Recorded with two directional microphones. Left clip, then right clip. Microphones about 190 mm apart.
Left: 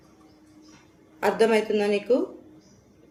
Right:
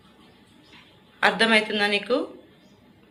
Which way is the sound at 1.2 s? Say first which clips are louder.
Right 2 dB; 15° left (ahead or behind).